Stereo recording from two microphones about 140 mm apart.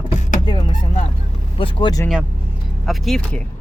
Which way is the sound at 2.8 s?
Centre (ahead or behind).